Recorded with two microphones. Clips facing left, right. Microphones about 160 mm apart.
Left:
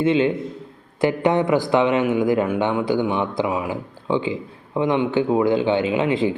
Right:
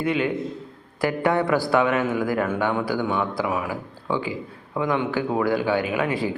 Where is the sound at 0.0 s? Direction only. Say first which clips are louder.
Left 5 dB; 25° left (ahead or behind).